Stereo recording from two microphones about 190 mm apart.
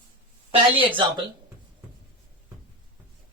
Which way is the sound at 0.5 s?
25° right (ahead or behind).